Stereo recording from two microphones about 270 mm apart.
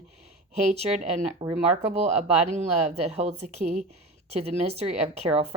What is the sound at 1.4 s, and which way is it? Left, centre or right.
Speech, centre.